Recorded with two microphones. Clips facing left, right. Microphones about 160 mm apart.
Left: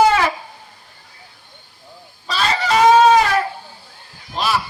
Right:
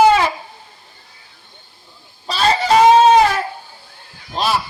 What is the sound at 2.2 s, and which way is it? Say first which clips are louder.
Fowl: right 4 dB; 35° right (ahead or behind).